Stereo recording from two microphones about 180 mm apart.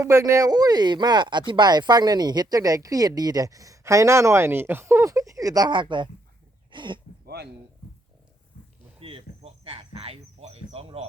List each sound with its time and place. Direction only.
0.0 s speech: 15° right (ahead or behind)
8.5 s a sound: 50° left (ahead or behind)
9.0 s cricket: 30° right (ahead or behind)